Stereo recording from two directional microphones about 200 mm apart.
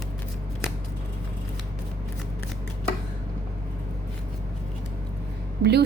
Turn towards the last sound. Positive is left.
turn(degrees=-55)  # may be behind; listen again after turning